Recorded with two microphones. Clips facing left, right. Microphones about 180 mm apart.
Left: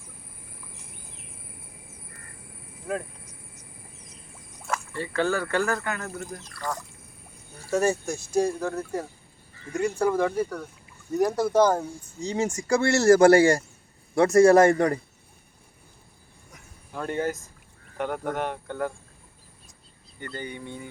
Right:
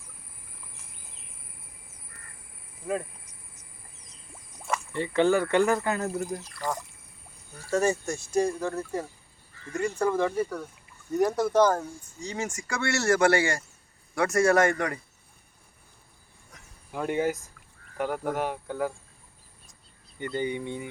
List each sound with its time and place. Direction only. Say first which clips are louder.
4.9 s speech: right 4 dB; 20° right (ahead or behind)
7.7 s speech: left 1 dB; 10° left (ahead or behind)
9.7 s speech: left 2 dB; 10° left (ahead or behind)
12.2 s speech: left 6 dB; 30° left (ahead or behind)
16.9 s speech: right 1 dB; 10° right (ahead or behind)
20.1 s speech: right 6 dB; 15° right (ahead or behind)